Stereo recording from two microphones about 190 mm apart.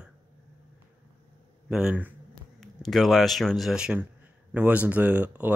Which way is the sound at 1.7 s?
5° right (ahead or behind).